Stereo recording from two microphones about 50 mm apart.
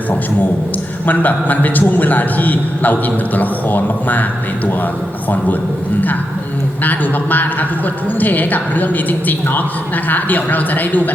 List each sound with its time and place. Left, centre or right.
1.0 s a woman's voice: left
6.8 s a woman's voice: left